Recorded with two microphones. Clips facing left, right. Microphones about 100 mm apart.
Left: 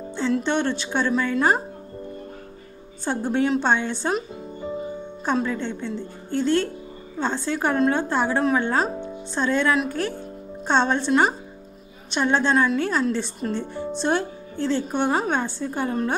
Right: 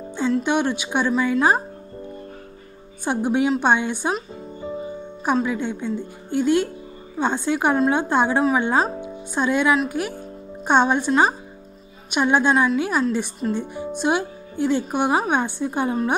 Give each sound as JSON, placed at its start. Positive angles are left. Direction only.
{"t": 0.4, "sound": "speech", "side_deg": -10}
{"t": 3.1, "sound": "speech", "side_deg": -15}
{"t": 4.1, "sound": "music", "side_deg": 0}
{"t": 5.2, "sound": "speech", "side_deg": -10}